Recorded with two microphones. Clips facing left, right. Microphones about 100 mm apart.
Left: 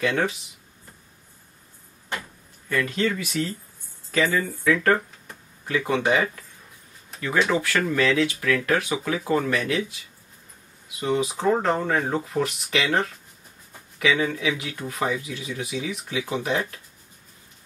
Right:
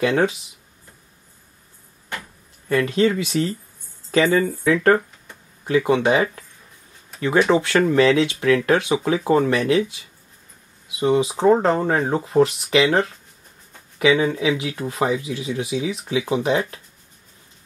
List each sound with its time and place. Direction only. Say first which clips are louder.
0.0 s speech: right 5 dB; 25° right (ahead or behind)
2.7 s speech: right 6 dB; 20° right (ahead or behind)
7.4 s speech: right 6 dB; 25° right (ahead or behind)
11.0 s speech: right 6 dB; 25° right (ahead or behind)